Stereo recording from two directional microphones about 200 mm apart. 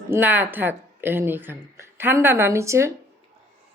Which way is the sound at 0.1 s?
10° right (ahead or behind).